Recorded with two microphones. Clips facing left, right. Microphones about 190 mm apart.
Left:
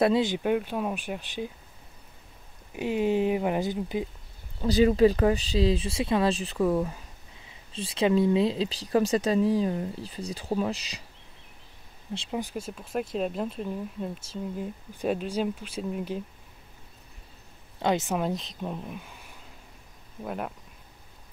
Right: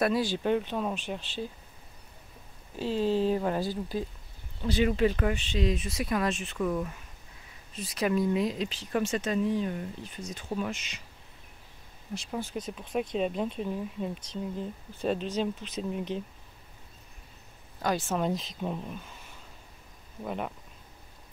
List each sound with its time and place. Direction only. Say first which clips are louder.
0.0 s speech: left 4 dB; 20° left (ahead or behind)
0.4 s speech: left 1 dB; 10° left (ahead or behind)
2.7 s speech: left 2 dB; 15° left (ahead or behind)
4.6 s speech: left 5 dB; 35° left (ahead or behind)
12.1 s speech: left 3 dB; 20° left (ahead or behind)
12.9 s speech: even; 5° left (ahead or behind)
17.7 s speech: left 4 dB; 20° left (ahead or behind)
18.1 s speech: left 1 dB; centre (ahead or behind)
20.2 s speech: left 1 dB; centre (ahead or behind)